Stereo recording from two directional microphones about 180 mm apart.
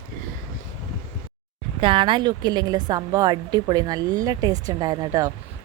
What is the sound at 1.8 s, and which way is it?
A woman's voice, 30° right (ahead or behind).